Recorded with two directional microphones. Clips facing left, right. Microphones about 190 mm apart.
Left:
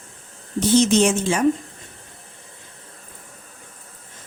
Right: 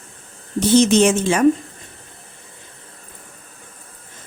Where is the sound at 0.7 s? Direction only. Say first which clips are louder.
Right 3 dB; 65° right (ahead or behind).